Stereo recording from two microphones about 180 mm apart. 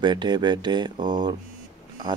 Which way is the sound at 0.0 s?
25° right (ahead or behind).